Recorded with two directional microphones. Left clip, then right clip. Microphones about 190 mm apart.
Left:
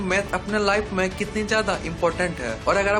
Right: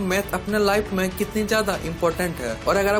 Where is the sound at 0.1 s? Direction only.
40° right (ahead or behind).